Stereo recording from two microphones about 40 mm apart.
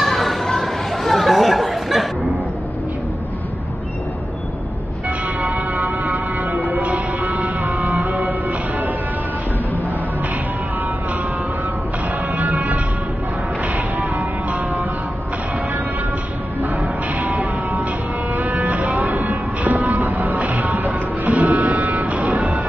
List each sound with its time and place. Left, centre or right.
0.0 s children playing: centre
1.0 s chatter: centre
5.4 s a sound: right
6.6 s music: right
12.4 s music: right
17.2 s music: right